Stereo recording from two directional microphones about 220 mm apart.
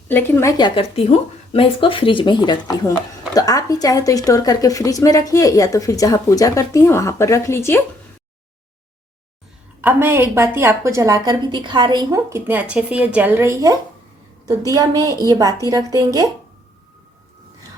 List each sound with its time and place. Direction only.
0.1 s a woman's voice: 10° left (ahead or behind)
9.8 s a woman's voice: 10° right (ahead or behind)